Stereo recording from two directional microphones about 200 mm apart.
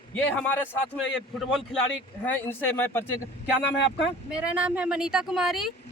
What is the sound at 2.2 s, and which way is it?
Speech, 10° left (ahead or behind).